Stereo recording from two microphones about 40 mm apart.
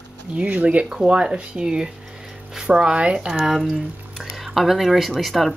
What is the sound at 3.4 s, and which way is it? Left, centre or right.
Speech, centre.